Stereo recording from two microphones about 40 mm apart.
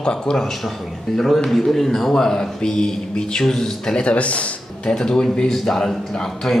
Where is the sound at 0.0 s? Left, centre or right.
Left.